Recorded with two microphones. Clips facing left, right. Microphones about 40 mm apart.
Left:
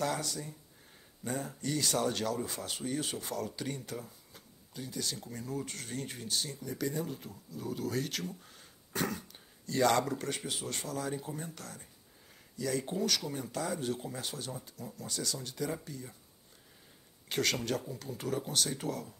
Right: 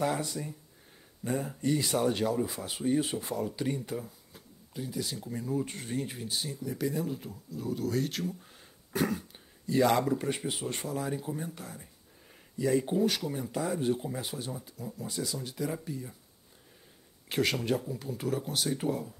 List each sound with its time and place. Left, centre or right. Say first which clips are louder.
0.0 s speech: right 3 dB; right
13.2 s speech: right 4 dB; centre
13.5 s speech: right 5 dB; centre
14.5 s speech: right 3 dB; centre
15.3 s speech: right 2 dB; centre
17.3 s speech: right 3 dB; centre
18.8 s speech: right 5 dB; right